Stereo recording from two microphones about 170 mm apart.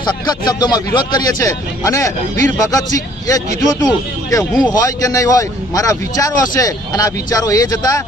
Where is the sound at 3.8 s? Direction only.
20° left (ahead or behind).